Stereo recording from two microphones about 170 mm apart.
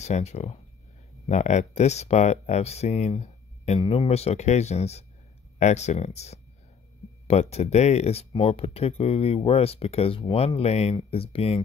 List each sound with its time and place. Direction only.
0.0 s speech: 40° left (ahead or behind)